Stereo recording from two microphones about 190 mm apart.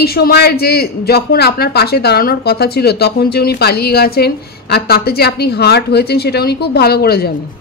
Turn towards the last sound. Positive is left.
turn(degrees=55)  # may be behind; listen again after turning